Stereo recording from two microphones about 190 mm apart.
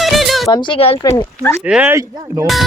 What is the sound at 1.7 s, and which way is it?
Speech, 5° right (ahead or behind).